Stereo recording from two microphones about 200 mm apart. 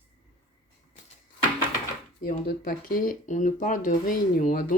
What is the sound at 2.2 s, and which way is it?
Speech, 45° left (ahead or behind).